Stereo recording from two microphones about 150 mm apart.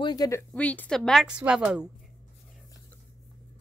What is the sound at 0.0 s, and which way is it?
Speech, 25° left (ahead or behind).